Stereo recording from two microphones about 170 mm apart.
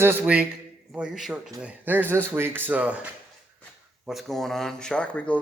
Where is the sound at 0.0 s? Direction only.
10° right (ahead or behind).